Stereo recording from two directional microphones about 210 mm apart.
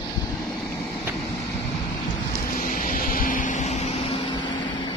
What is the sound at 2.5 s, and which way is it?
Vehicle, 40° left (ahead or behind).